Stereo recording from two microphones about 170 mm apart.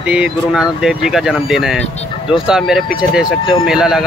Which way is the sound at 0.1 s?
5° right (ahead or behind).